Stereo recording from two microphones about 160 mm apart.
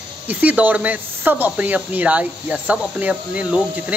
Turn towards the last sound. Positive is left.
turn(degrees=-5)  # may be behind; listen again after turning